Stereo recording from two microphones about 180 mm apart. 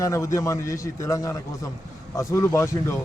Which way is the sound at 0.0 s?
15° left (ahead or behind).